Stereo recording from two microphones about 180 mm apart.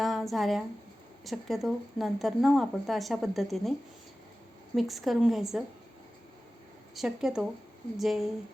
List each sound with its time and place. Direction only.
0.0 s a sound: centre (ahead or behind)
1.2 s speech: centre (ahead or behind)
6.9 s speech: centre (ahead or behind)